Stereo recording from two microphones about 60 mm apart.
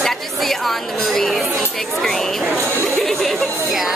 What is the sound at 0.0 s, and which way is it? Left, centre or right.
Chatter, centre.